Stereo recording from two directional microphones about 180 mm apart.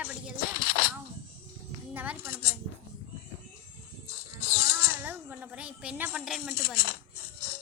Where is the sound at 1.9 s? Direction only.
10° right (ahead or behind).